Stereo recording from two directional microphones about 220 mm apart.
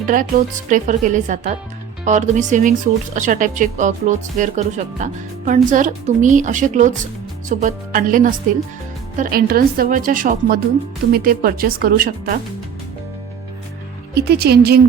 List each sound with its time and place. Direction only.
0.0 s speech: 40° right (ahead or behind)
14.2 s speech: 45° right (ahead or behind)